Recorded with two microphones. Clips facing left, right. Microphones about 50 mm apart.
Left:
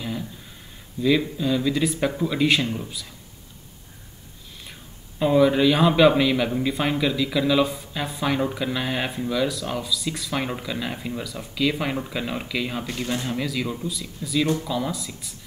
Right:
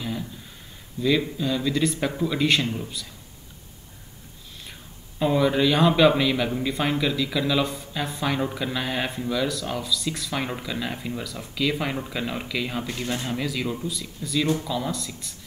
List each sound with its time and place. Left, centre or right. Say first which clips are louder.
1.0 s a man's voice: left 2 dB; centre
5.2 s a man's voice: left 3 dB; centre